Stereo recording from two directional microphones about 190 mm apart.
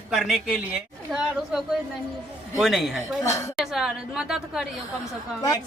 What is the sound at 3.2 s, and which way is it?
Speech, 15° left (ahead or behind).